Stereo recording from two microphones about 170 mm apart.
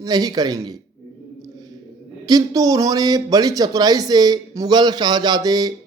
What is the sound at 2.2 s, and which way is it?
A man's voice, 20° right (ahead or behind).